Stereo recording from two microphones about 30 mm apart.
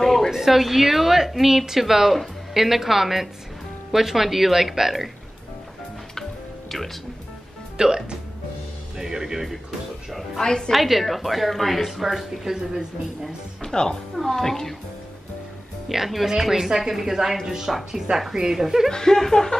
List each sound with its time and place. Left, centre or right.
0.0 s a sound: centre
0.3 s a woman's voice: centre
7.7 s speech: right
8.9 s music: right
10.4 s a woman's voice: left
10.7 s a woman's voice: centre
13.6 s speech: left
14.1 s a woman's voice: centre
15.9 s a woman's voice: centre
18.9 s speech: centre